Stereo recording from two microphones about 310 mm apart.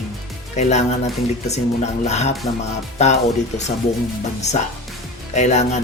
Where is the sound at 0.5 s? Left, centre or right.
Left.